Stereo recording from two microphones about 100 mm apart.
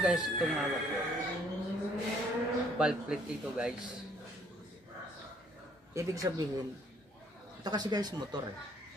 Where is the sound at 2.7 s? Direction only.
10° right (ahead or behind).